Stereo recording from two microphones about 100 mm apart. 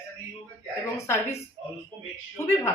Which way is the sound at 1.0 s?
30° left (ahead or behind).